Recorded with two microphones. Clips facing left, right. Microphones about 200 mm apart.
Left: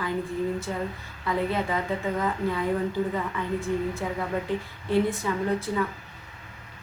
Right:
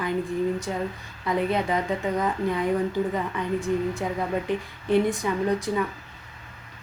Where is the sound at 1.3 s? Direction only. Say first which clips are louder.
Right 2 dB; 15° right (ahead or behind).